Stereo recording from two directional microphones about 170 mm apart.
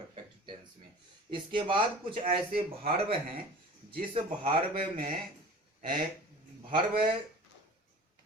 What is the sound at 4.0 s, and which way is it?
Speech, 30° right (ahead or behind).